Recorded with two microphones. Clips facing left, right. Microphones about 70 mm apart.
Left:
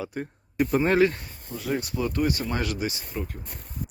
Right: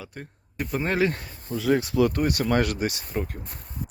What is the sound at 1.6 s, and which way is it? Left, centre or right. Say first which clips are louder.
Speech: right 7 dB; right.